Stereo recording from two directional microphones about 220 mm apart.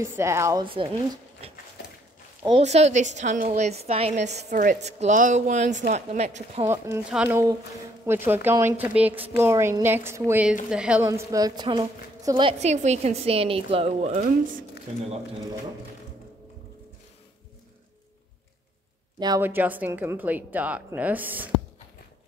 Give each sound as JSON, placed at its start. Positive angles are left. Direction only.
{"t": 0.0, "sound": "speech", "side_deg": -15}
{"t": 1.4, "sound": "a sound", "side_deg": -25}
{"t": 2.4, "sound": "a woman's voice", "side_deg": -25}
{"t": 6.7, "sound": "a woman's voice", "side_deg": -10}
{"t": 19.1, "sound": "speech", "side_deg": -15}